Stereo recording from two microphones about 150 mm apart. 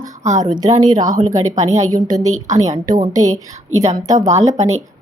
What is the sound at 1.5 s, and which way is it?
Speech, 50° right (ahead or behind).